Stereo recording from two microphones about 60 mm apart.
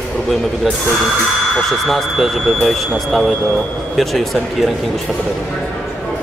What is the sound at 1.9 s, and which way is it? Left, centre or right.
Speech, centre.